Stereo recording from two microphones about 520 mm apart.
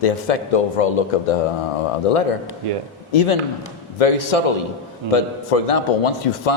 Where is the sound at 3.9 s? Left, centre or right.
Left.